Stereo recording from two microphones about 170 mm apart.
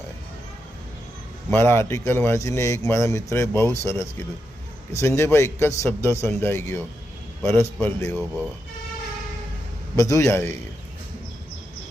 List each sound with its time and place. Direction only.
1.5 s a man's voice: 15° left (ahead or behind)
9.9 s a man's voice: 20° left (ahead or behind)